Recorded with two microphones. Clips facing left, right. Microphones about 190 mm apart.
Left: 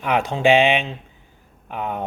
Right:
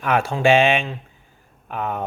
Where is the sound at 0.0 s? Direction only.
15° left (ahead or behind).